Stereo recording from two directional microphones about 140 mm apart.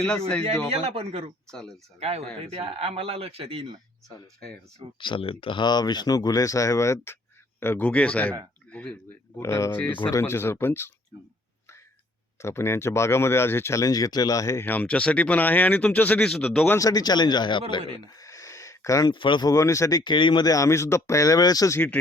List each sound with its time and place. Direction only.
0.7 s speech: 45° right (ahead or behind)
1.5 s speech: 5° left (ahead or behind)
2.0 s speech: 50° right (ahead or behind)
4.4 s speech: 5° left (ahead or behind)
4.9 s speech: 35° left (ahead or behind); by 10.9 s 15° left (ahead or behind)
12.4 s speech: 20° left (ahead or behind)
16.7 s a man's voice: 25° left (ahead or behind)
18.1 s a sound: 25° left (ahead or behind)
19.1 s speech: 35° left (ahead or behind)